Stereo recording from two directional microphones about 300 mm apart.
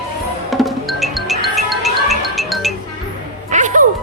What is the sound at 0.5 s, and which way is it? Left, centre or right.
Music, centre.